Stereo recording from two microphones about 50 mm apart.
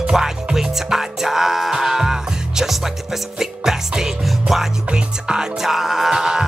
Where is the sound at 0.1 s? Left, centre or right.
Centre.